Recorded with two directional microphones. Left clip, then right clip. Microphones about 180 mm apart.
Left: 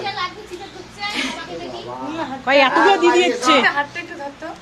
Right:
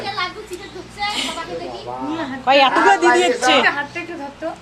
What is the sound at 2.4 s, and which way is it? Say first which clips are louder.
A man's voice: right 1 dB; 15° left (ahead or behind).